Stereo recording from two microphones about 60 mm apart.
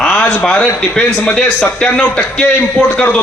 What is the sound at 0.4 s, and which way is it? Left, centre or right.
A man's voice, centre.